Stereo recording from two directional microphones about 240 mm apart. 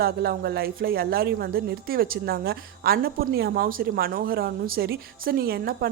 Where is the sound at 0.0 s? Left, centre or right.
Right.